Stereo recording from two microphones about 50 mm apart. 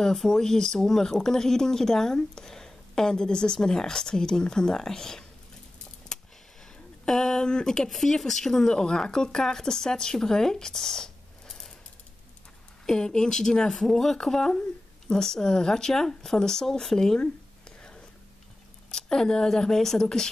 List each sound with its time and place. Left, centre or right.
0.0 s speech: centre
7.1 s speech: centre
7.9 s speech: centre
12.8 s speech: centre
17.2 s a sound: centre
18.9 s speech: centre